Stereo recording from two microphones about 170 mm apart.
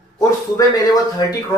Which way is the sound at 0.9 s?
20° left (ahead or behind).